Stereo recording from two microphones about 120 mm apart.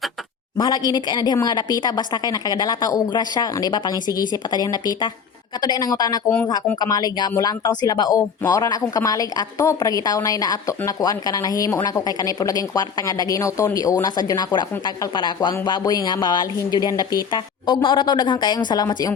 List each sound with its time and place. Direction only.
0.5 s a woman's voice: 35° left (ahead or behind)